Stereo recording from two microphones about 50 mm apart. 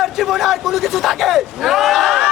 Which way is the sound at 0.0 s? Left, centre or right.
Centre.